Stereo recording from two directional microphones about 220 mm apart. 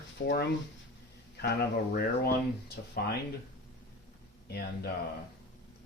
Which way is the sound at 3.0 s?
45° left (ahead or behind).